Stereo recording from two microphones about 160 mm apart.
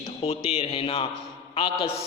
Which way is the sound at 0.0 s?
40° left (ahead or behind).